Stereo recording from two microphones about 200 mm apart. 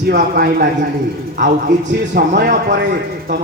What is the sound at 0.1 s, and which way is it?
Speech, 50° right (ahead or behind).